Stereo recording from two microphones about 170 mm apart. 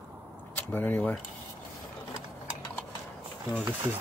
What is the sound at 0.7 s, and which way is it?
Speech, 10° left (ahead or behind).